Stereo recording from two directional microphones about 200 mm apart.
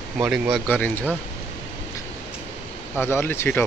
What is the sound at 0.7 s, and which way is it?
Speech, 10° left (ahead or behind).